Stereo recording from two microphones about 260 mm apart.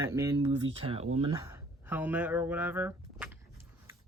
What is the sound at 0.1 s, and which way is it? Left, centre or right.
Speech, centre.